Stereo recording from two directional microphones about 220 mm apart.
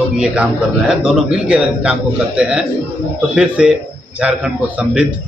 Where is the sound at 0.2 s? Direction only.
5° right (ahead or behind).